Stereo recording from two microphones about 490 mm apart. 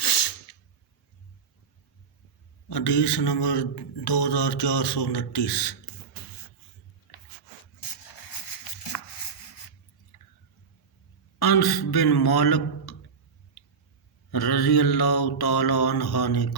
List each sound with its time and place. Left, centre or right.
0.0 s a sound: left
2.6 s a man's voice: left
11.3 s a man's voice: left
14.3 s mantra: left